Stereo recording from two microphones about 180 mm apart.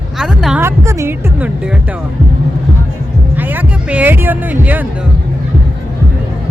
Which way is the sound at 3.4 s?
10° right (ahead or behind).